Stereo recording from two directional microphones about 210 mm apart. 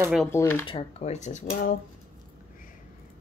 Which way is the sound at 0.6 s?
25° left (ahead or behind).